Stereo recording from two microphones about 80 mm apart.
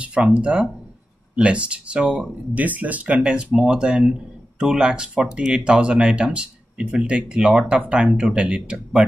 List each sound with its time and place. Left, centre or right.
0.0 s speech: centre